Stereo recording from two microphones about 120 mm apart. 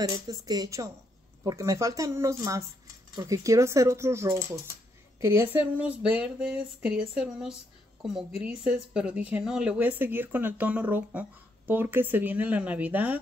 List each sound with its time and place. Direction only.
0.0 s a woman's voice: 30° right (ahead or behind); by 13.2 s 15° right (ahead or behind)